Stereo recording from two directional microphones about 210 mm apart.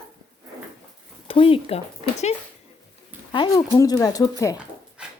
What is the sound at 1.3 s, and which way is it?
Speech, 25° left (ahead or behind).